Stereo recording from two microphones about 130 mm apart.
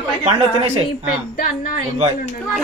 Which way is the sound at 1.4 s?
90° left.